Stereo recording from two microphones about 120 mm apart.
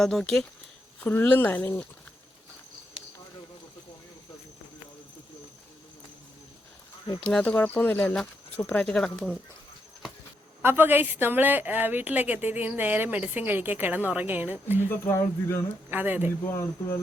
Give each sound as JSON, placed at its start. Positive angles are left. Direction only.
{"t": 0.0, "sound": "speech", "side_deg": 5}
{"t": 1.0, "sound": "speech", "side_deg": 15}
{"t": 7.3, "sound": "speech", "side_deg": 10}
{"t": 10.6, "sound": "a woman's voice", "side_deg": -20}
{"t": 14.8, "sound": "speech", "side_deg": 20}
{"t": 15.9, "sound": "a woman's voice", "side_deg": -15}